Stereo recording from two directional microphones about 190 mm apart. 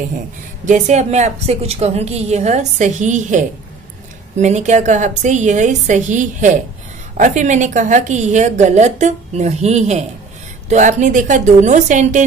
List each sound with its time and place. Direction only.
0.7 s a woman's voice: 35° right (ahead or behind)